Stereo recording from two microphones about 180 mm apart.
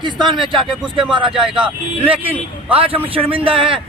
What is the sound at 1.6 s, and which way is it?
A man's voice, 30° right (ahead or behind).